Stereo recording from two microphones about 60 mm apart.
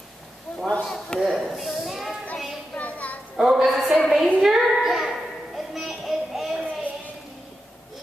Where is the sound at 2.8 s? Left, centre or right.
Left.